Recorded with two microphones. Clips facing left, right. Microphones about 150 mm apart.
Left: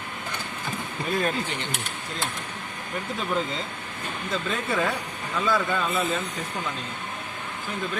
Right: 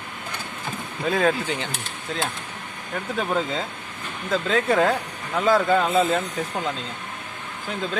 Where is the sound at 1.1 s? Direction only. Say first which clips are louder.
Right 4 dB; 90° right.